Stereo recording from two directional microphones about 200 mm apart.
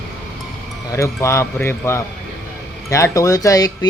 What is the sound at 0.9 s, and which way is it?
Speech, 15° left (ahead or behind).